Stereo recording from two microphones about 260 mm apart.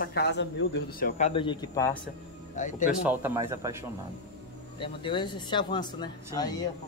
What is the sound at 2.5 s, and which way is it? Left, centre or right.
Speech, left.